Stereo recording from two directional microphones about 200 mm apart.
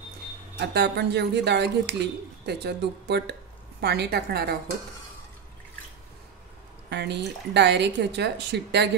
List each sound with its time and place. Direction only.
0.6 s a woman's voice: 55° right (ahead or behind)
6.9 s speech: 55° right (ahead or behind)